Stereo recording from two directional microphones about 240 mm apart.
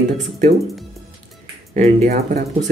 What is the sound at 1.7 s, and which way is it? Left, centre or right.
Speech, right.